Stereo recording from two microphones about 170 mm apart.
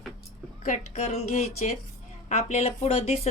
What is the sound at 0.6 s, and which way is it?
Speech, 45° left (ahead or behind).